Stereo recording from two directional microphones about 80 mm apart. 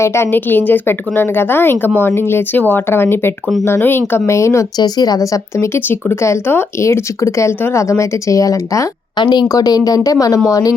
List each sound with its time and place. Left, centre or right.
0.0 s a woman's voice: left
4.3 s a woman's voice: left
4.8 s a woman's voice: left
9.1 s speech: left
9.5 s a woman's voice: left